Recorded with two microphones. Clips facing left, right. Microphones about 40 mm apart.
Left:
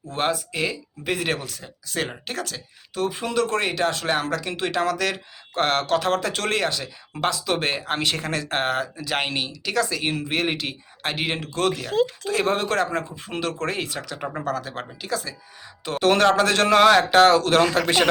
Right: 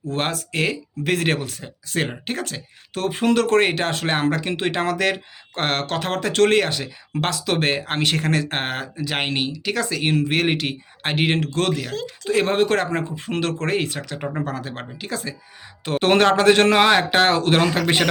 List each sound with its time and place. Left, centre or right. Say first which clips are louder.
0.1 s speech: even; right
1.3 s speech: right 3 dB; right
2.9 s speech: right 4 dB; right
7.3 s speech: right 2 dB; right
9.0 s speech: right 2 dB; centre
9.8 s speech: right 4 dB; right
12.2 s speech: right 4 dB; right
14.2 s speech: right 4 dB; centre
14.4 s speech: left 1 dB; right
15.8 s speech: right 2 dB; right